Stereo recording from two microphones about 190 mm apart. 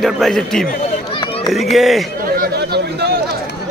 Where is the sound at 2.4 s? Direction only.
60° right (ahead or behind).